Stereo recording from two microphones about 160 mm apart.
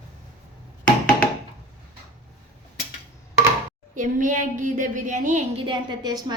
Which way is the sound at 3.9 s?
55° right (ahead or behind).